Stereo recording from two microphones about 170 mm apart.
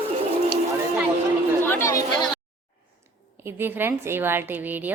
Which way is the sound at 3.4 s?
10° right (ahead or behind).